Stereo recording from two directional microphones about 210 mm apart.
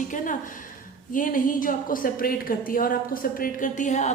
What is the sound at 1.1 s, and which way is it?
A woman's voice, 40° left (ahead or behind).